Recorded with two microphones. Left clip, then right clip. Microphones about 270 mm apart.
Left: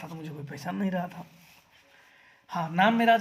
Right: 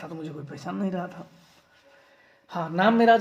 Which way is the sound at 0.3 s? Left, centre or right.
Left.